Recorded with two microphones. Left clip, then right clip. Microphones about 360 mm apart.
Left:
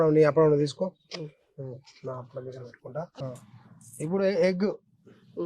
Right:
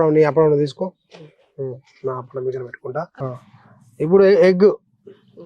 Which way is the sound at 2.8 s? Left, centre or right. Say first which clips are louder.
Right 6 dB; right.